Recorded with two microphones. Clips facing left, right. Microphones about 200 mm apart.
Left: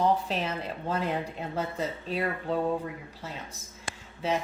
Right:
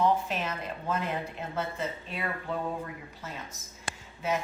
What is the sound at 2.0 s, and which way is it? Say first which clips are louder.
Speech: left 5 dB; 35° left (ahead or behind).